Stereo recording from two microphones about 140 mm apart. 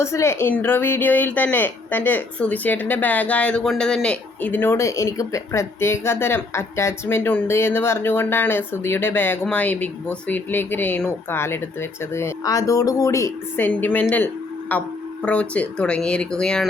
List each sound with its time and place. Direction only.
0.0 s speech: 20° left (ahead or behind)